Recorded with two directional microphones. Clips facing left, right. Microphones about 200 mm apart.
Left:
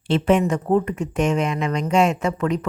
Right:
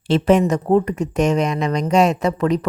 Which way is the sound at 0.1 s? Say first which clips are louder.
Right 3 dB; 40° right (ahead or behind).